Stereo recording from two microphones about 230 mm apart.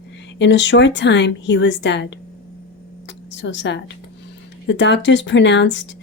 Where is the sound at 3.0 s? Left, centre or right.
Left.